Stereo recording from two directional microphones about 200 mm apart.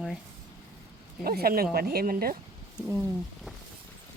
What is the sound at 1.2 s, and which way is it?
A woman's voice, 50° right (ahead or behind).